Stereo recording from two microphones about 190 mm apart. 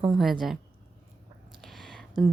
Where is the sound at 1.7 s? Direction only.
Centre (ahead or behind).